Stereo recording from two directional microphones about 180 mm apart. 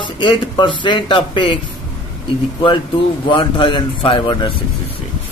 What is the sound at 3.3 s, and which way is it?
Speech, 25° left (ahead or behind).